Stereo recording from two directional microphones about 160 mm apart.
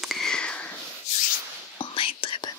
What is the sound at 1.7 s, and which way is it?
Whispering, 35° left (ahead or behind).